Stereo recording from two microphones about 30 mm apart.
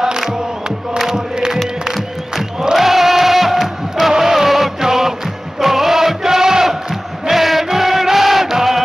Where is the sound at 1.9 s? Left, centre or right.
Centre.